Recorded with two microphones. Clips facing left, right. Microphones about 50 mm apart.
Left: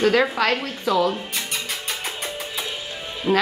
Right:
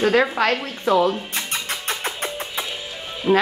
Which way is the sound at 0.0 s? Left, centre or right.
Centre.